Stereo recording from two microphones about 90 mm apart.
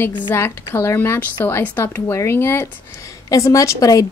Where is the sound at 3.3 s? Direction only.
35° left (ahead or behind).